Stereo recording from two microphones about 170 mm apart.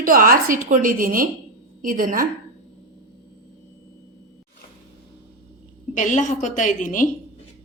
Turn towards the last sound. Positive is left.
turn(degrees=50)  # may be behind; listen again after turning